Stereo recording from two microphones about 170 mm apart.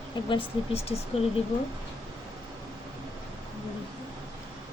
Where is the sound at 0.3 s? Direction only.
35° left (ahead or behind).